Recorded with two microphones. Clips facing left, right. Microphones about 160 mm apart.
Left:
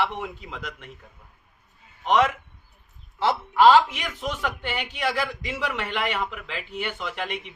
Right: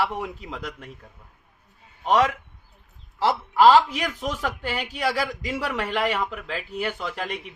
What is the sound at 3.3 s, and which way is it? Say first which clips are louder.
Speech: right 1 dB; 35° right (ahead or behind).